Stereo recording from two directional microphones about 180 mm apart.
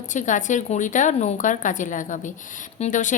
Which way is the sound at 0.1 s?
45° left (ahead or behind).